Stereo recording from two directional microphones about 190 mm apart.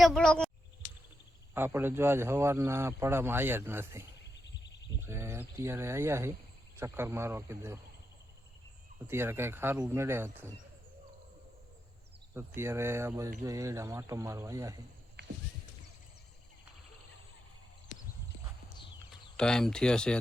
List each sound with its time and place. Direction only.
0.0 s speech: 5° left (ahead or behind)
1.5 s speech: 10° right (ahead or behind)
4.2 s a sound: 65° left (ahead or behind)
5.0 s speech: 15° right (ahead or behind)
9.0 s speech: 10° right (ahead or behind)
12.5 s speech: 15° right (ahead or behind)
19.4 s speech: 5° left (ahead or behind)